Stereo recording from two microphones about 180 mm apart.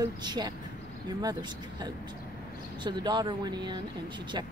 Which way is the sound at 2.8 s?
25° right (ahead or behind).